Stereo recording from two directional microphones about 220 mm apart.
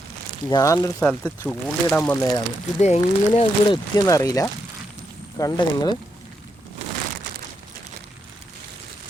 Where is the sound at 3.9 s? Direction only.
15° left (ahead or behind).